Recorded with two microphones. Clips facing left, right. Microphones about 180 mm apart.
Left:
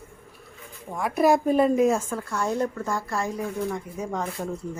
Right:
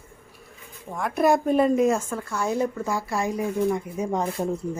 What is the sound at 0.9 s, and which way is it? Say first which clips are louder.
A woman's voice: even; centre (ahead or behind).